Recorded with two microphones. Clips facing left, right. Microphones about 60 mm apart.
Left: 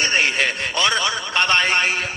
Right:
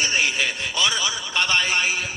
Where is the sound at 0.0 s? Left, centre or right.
Left.